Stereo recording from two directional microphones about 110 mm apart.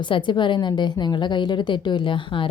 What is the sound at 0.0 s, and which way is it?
A woman's voice, 45° left (ahead or behind).